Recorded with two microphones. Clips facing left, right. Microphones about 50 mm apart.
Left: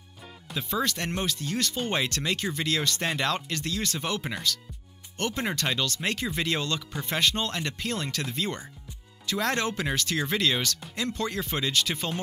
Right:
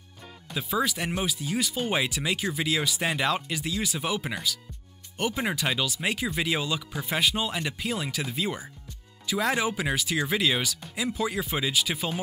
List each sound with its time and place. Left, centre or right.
0.5 s speech: centre